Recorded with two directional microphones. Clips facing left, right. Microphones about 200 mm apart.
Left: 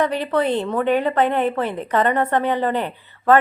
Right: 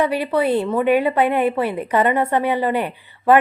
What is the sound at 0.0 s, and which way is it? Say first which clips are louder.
A woman's voice: right 1 dB; 10° right (ahead or behind).